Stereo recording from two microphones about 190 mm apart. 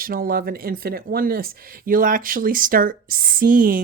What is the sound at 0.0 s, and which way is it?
Speech, 50° right (ahead or behind).